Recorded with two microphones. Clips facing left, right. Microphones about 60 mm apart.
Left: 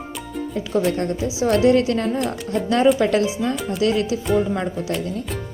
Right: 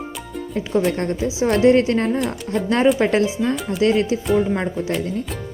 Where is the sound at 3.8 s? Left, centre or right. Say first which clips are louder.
Right 3 dB; right.